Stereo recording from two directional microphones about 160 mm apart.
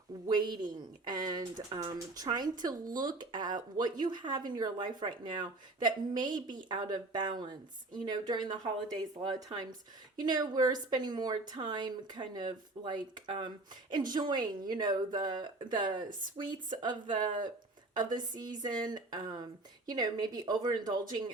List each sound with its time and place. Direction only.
0.3 s speech: 25° right (ahead or behind)
10.2 s speech: 25° right (ahead or behind)